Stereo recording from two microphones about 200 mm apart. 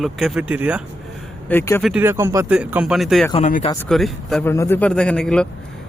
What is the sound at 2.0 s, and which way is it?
Speech, 15° right (ahead or behind).